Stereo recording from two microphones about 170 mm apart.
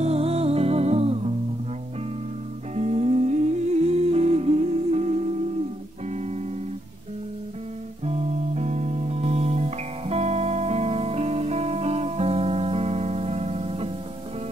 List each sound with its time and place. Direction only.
0.0 s music: 35° right (ahead or behind)
2.7 s music: 40° right (ahead or behind)
8.0 s music: 40° right (ahead or behind)